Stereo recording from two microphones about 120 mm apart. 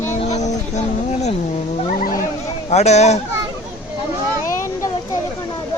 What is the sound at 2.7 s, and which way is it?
Speech, 70° left (ahead or behind).